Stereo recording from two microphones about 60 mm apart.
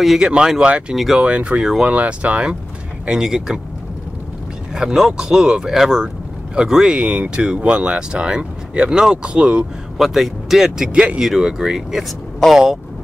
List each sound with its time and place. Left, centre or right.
0.0 s speech: centre
0.9 s speech: centre
1.2 s speech: centre
4.7 s speech: centre
9.9 s speech: centre